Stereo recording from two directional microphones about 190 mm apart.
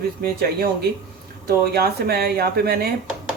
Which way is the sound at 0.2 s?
50° right (ahead or behind).